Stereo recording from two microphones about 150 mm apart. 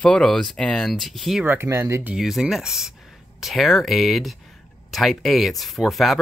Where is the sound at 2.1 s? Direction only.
5° right (ahead or behind).